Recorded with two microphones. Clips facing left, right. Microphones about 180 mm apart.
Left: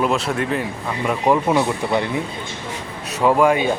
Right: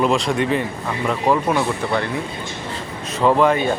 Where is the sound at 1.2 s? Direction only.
15° left (ahead or behind).